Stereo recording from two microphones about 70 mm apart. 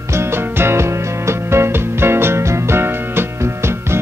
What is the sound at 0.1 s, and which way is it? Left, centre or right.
Music, right.